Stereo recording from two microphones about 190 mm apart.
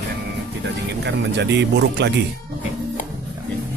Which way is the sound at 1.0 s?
65° right (ahead or behind).